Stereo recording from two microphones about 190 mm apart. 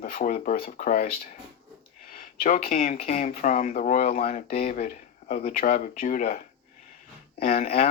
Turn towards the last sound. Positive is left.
turn(degrees=50)  # may be behind; listen again after turning